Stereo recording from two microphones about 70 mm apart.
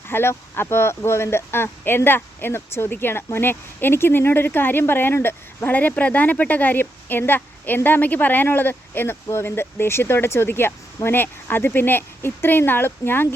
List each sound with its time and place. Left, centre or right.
0.1 s speech: left